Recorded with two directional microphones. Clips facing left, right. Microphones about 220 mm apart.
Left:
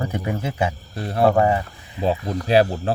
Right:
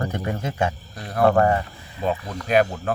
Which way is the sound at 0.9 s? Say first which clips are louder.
Left 5 dB; 30° left (ahead or behind).